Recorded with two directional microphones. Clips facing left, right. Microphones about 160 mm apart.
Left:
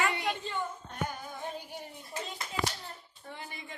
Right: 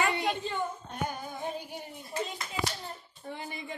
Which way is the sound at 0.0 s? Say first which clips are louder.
Right 2 dB; 25° right (ahead or behind).